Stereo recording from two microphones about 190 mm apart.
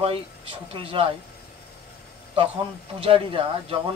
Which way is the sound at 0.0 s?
25° right (ahead or behind).